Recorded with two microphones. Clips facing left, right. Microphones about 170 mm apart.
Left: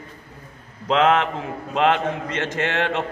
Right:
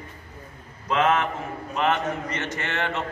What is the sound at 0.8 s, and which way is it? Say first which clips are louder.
A man's voice: left 4 dB; 90° left.